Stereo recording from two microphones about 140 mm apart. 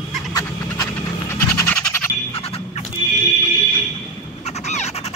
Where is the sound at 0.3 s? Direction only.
25° left (ahead or behind).